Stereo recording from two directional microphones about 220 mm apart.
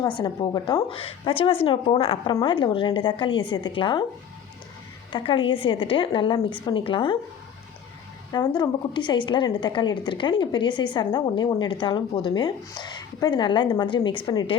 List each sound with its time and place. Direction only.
0.0 s a woman's voice: 20° left (ahead or behind)
5.1 s a woman's voice: 25° left (ahead or behind)
8.3 s a woman's voice: 20° left (ahead or behind)